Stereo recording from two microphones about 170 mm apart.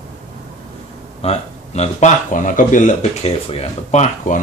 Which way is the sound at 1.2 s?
40° left (ahead or behind).